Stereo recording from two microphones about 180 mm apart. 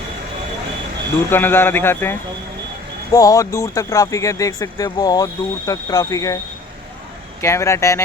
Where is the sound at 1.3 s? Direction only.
10° left (ahead or behind).